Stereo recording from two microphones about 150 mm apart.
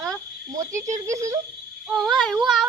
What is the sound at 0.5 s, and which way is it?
Speech, 20° right (ahead or behind).